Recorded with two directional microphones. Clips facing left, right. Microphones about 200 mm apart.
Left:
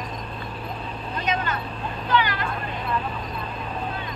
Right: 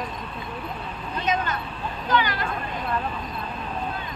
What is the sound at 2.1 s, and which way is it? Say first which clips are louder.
Speech: even; 45° right (ahead or behind).